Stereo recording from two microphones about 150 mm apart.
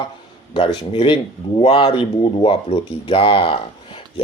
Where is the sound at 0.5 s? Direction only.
30° left (ahead or behind).